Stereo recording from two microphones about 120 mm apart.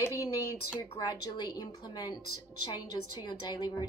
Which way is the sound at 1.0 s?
35° left (ahead or behind).